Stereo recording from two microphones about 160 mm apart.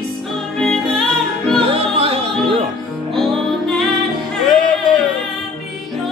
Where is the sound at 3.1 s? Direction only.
Centre (ahead or behind).